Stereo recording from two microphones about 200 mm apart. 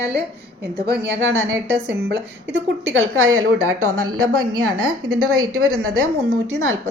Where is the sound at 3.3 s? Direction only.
90° right.